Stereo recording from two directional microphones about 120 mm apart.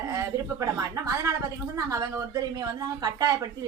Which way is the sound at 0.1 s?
30° right (ahead or behind).